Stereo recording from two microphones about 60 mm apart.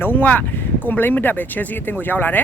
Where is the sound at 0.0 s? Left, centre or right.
Left.